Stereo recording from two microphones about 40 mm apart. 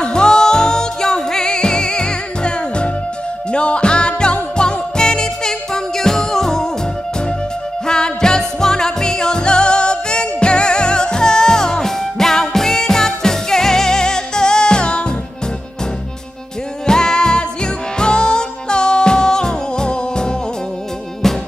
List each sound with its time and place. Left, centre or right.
0.0 s music: centre
7.8 s music: centre
16.8 s music: centre
21.2 s music: centre